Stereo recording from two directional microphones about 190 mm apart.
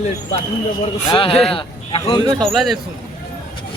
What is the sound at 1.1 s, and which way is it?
Speech, 30° left (ahead or behind).